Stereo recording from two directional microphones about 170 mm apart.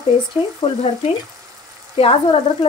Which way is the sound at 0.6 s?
30° left (ahead or behind).